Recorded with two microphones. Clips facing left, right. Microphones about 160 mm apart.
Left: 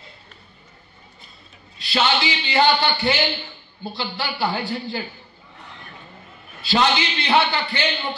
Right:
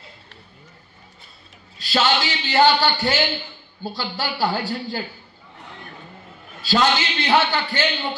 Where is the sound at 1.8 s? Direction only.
40° right (ahead or behind).